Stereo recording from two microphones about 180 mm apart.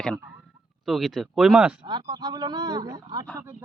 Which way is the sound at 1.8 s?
25° right (ahead or behind).